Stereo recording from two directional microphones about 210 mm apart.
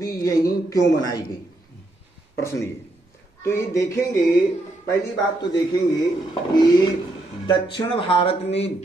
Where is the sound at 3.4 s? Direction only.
15° left (ahead or behind).